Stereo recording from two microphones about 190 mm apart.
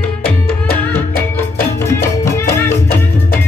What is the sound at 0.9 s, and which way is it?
Music, 15° left (ahead or behind).